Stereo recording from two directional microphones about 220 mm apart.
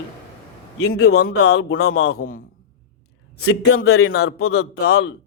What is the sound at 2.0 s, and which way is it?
Speech, 45° left (ahead or behind).